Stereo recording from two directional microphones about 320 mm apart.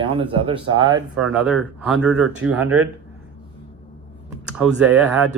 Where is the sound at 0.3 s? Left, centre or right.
Centre.